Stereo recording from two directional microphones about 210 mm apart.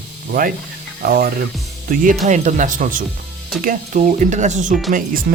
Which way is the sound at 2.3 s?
35° right (ahead or behind).